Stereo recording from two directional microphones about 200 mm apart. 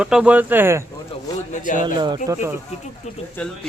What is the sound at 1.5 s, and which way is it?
Speech, 40° left (ahead or behind).